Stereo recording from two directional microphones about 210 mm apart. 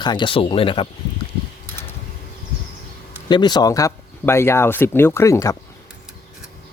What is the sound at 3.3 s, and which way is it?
Speech, 20° left (ahead or behind).